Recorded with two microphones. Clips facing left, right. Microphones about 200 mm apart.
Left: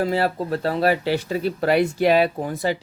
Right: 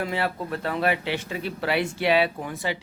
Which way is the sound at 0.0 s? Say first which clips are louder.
Left 6 dB; 35° left (ahead or behind).